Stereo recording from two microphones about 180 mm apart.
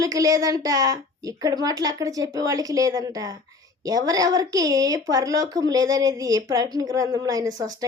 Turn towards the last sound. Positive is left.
turn(degrees=-20)  # may be behind; listen again after turning